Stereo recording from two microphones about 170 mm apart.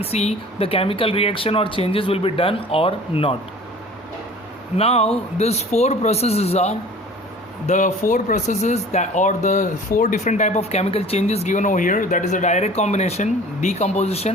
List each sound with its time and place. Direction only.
0.0 s speech: 40° left (ahead or behind)
4.8 s speech: 35° left (ahead or behind)